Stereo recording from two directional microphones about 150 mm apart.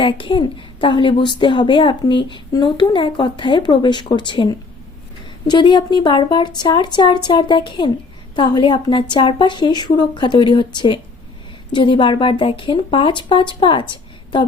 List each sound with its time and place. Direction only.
0.0 s a woman's voice: 35° left (ahead or behind)
5.5 s a woman's voice: 30° left (ahead or behind)